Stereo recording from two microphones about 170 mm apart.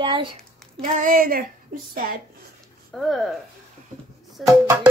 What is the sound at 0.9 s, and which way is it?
Child singing, 50° right (ahead or behind).